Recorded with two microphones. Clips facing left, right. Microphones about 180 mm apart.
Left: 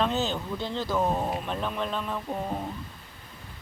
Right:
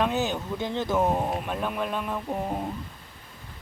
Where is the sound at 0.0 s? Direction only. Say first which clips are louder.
Right 1 dB; 15° right (ahead or behind).